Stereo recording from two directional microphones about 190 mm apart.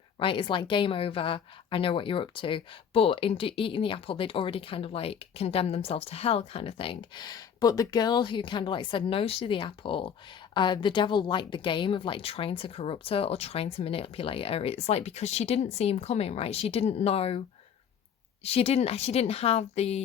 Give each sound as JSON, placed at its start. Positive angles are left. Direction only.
{"t": 0.2, "sound": "a woman's voice", "side_deg": 25}
{"t": 18.4, "sound": "a woman's voice", "side_deg": 30}